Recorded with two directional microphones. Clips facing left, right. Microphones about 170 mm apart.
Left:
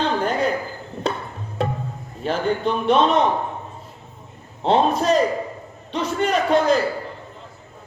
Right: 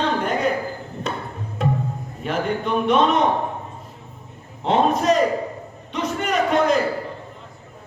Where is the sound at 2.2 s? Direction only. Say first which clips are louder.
Left 2 dB; 30° left (ahead or behind).